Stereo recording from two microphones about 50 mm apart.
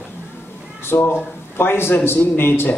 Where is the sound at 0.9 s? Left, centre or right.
Left.